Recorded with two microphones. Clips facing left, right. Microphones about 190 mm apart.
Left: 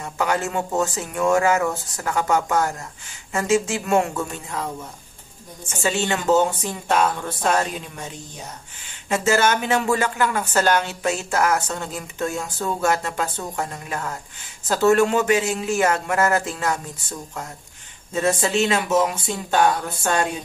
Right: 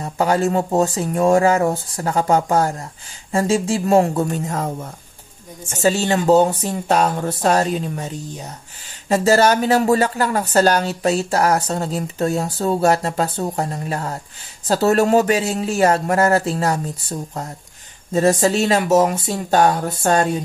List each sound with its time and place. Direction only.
0.0 s speech: 35° right (ahead or behind)
5.7 s speech: 40° right (ahead or behind)
9.1 s speech: 35° right (ahead or behind)